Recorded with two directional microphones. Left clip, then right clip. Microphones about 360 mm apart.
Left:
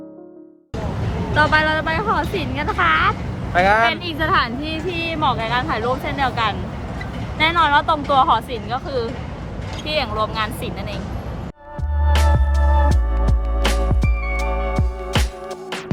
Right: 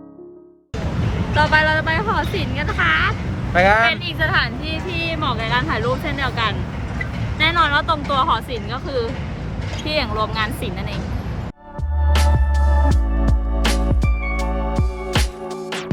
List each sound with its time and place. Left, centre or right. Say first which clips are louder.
1.4 s speech: even; left
3.8 s speech: even; left
12.1 s music: even; centre